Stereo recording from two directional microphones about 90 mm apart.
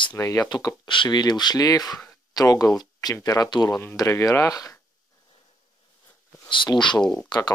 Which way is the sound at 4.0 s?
35° left (ahead or behind).